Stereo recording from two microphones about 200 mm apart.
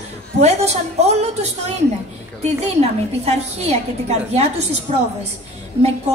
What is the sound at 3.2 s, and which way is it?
A woman's voice, 30° right (ahead or behind).